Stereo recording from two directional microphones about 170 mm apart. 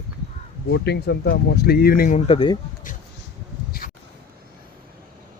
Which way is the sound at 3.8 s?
50° left (ahead or behind).